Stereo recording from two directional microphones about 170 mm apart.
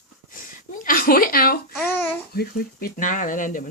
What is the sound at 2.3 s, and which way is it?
Speech, 65° left (ahead or behind).